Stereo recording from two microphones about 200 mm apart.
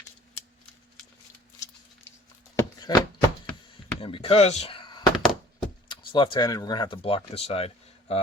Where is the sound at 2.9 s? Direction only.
20° left (ahead or behind).